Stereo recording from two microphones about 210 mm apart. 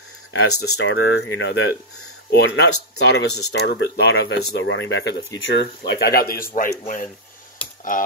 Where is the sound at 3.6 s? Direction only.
50° left (ahead or behind).